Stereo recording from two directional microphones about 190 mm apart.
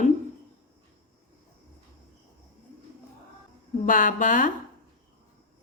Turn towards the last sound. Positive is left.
turn(degrees=40)  # may be behind; listen again after turning